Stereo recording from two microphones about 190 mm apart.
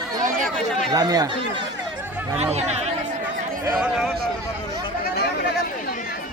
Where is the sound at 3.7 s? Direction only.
Centre (ahead or behind).